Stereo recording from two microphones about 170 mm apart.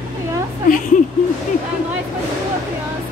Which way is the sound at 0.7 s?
50° left (ahead or behind).